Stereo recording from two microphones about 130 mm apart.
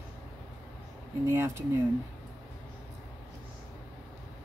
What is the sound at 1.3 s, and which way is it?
Speech, 20° right (ahead or behind).